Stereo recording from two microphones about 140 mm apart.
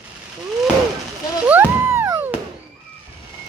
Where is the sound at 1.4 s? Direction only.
10° right (ahead or behind).